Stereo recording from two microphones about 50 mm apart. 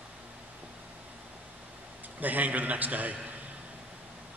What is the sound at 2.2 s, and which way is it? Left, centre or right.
A man's voice, right.